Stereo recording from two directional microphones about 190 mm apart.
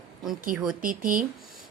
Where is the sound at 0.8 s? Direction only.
45° right (ahead or behind).